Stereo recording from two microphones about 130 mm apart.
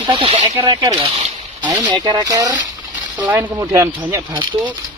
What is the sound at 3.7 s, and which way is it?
Speech, 20° right (ahead or behind).